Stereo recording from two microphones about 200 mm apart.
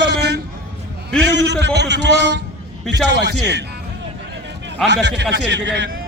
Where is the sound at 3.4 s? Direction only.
60° right (ahead or behind).